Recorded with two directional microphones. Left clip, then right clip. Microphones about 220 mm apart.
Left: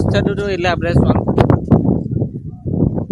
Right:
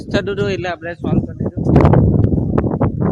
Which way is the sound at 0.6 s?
45° left (ahead or behind).